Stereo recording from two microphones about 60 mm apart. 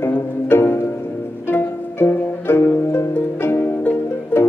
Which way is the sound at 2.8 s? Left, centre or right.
Left.